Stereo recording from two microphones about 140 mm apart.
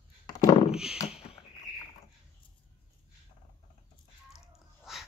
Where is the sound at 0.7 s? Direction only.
5° right (ahead or behind).